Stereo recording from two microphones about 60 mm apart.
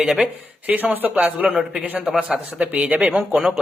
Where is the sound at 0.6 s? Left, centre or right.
Right.